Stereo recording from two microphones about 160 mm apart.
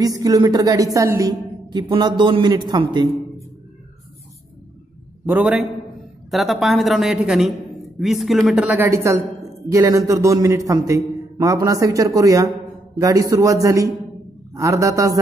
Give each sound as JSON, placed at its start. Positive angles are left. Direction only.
{"t": 0.0, "sound": "a woman's voice", "side_deg": -25}
{"t": 5.2, "sound": "a woman's voice", "side_deg": -10}